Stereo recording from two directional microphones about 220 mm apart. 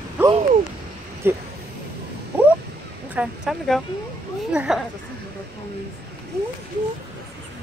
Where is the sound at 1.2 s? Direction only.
10° right (ahead or behind).